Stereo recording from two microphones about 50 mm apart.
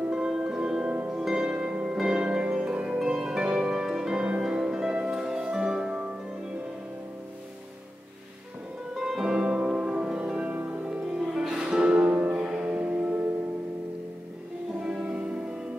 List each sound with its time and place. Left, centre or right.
0.1 s music: centre
1.0 s harp: centre
8.9 s music: centre
11.8 s music: right
14.8 s music: centre